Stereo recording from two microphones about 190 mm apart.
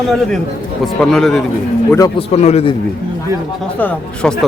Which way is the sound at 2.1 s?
35° left (ahead or behind).